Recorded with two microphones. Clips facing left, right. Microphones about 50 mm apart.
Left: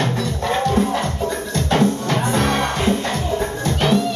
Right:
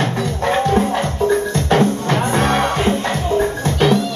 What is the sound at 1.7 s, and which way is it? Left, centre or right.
Music, right.